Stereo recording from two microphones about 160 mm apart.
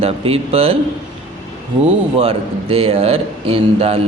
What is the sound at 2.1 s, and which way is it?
A man's voice, 35° right (ahead or behind).